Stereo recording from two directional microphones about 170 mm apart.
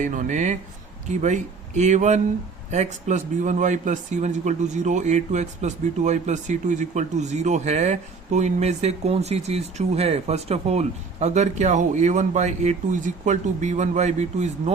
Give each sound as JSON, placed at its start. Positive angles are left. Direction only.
{"t": 0.0, "sound": "a man's voice", "side_deg": -50}